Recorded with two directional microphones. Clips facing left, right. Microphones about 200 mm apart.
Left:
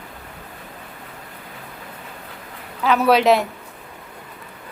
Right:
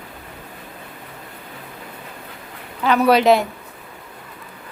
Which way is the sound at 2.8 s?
Centre (ahead or behind).